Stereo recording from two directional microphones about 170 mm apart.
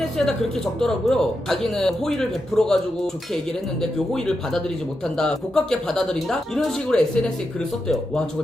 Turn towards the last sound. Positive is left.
turn(degrees=5)  # may be behind; listen again after turning